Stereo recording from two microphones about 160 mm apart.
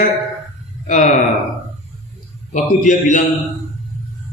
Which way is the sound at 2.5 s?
50° left (ahead or behind).